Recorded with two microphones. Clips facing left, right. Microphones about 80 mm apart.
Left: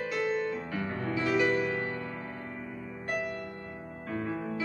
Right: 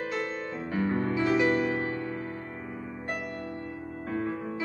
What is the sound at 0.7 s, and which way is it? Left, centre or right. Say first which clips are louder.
Music: right 5 dB; right.